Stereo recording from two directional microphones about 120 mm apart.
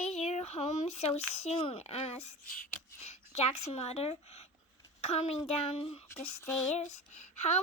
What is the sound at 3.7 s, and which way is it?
A child's voice, 60° left (ahead or behind).